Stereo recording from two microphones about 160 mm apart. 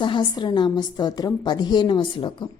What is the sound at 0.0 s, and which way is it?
A woman's voice, 30° left (ahead or behind).